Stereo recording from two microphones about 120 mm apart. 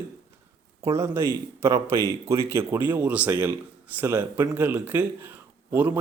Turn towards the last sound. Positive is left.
turn(degrees=-15)  # may be behind; listen again after turning